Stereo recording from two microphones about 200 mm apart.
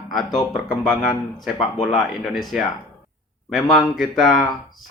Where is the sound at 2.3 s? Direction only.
Centre (ahead or behind).